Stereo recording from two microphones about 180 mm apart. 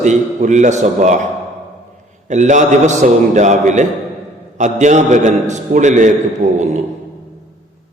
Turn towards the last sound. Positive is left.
turn(degrees=-40)  # may be behind; listen again after turning